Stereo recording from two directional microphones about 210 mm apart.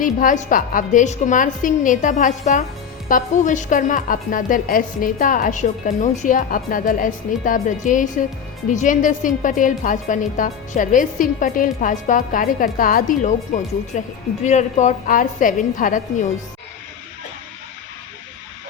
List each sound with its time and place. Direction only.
0.0 s a woman's voice: 40° left (ahead or behind)